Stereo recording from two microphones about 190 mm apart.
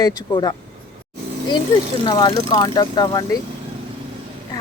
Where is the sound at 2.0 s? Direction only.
20° left (ahead or behind).